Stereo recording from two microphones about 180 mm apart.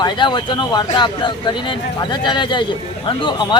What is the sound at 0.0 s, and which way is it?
Speech, 25° left (ahead or behind).